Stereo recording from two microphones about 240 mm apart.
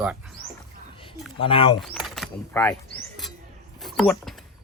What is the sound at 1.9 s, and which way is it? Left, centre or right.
Speech, centre.